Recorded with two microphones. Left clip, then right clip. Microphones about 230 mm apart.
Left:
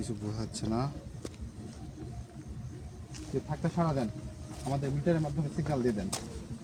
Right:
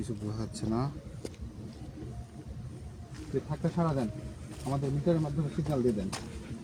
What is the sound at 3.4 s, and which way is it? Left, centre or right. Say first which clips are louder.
Speech: left 2 dB; centre.